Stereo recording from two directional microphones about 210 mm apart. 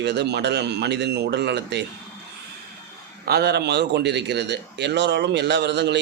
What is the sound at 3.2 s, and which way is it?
A man's voice, 50° right (ahead or behind).